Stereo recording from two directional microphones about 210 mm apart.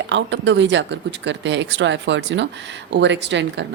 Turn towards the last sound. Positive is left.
turn(degrees=-60)  # may be behind; listen again after turning